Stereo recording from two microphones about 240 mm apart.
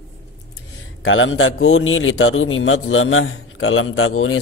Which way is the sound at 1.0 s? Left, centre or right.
Left.